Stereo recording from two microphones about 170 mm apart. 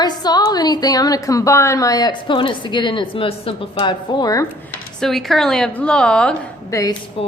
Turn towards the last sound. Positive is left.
turn(degrees=35)  # may be behind; listen again after turning